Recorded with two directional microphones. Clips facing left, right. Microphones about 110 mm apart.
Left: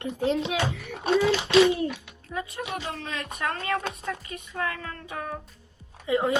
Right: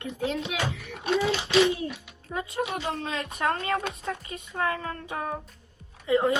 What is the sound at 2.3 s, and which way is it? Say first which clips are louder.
Speech: right 2 dB; 30° right (ahead or behind).